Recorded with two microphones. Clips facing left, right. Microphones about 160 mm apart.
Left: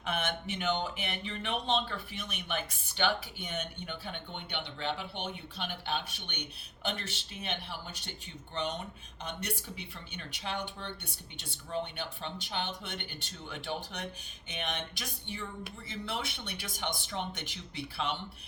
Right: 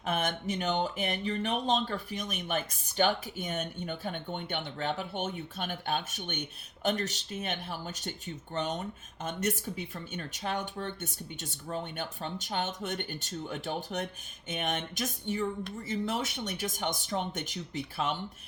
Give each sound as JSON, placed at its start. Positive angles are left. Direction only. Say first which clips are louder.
{"t": 0.0, "sound": "speech", "louder": "right 3 dB", "side_deg": -45}